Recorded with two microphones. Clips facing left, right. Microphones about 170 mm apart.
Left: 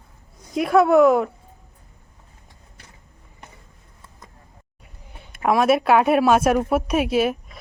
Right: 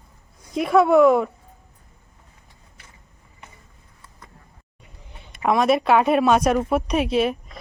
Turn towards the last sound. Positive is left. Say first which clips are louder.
# left 1 dB
turn(degrees=5)  # may be behind; listen again after turning